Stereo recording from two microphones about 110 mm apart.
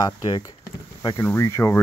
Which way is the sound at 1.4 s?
25° left (ahead or behind).